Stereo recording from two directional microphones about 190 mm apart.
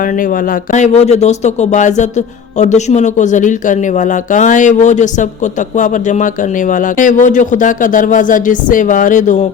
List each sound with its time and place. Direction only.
0.0 s speech: 45° left (ahead or behind)